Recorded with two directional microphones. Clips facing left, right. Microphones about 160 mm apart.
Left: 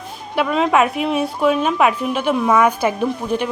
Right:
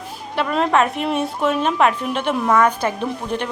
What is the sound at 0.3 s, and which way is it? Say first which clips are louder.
A woman's voice: left 2 dB; centre (ahead or behind).